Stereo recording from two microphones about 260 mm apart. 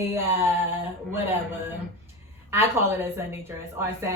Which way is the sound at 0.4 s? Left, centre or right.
Centre.